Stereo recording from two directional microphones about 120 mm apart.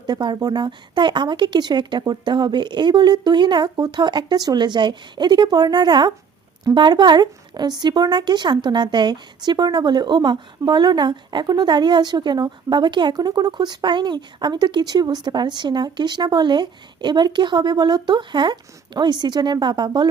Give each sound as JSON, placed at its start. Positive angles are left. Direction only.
{"t": 0.1, "sound": "speech", "side_deg": -35}